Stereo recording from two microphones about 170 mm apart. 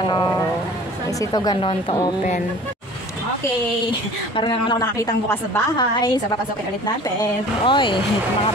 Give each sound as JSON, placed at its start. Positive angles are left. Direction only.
{"t": 0.0, "sound": "a man's voice", "side_deg": 25}
{"t": 4.4, "sound": "a man's voice", "side_deg": 25}
{"t": 5.8, "sound": "a man's voice", "side_deg": 25}
{"t": 7.6, "sound": "a man's voice", "side_deg": 30}